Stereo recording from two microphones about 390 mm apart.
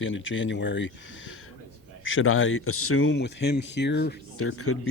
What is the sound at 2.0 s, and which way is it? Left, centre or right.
Speech, left.